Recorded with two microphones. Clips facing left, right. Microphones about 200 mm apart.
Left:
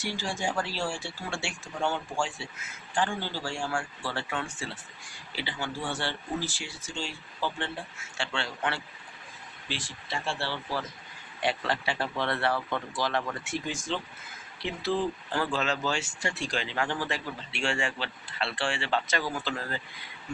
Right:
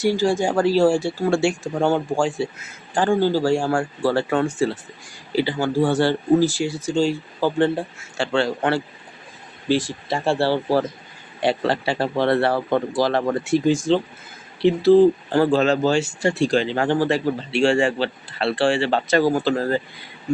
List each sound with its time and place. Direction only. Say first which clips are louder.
0.0 s speech: right 13 dB; 40° right (ahead or behind)